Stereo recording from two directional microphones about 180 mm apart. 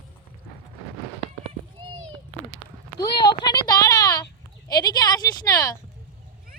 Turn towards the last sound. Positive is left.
turn(degrees=20)  # may be behind; listen again after turning